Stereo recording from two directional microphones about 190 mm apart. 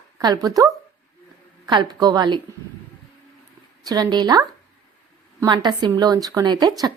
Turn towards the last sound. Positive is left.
turn(degrees=-20)  # may be behind; listen again after turning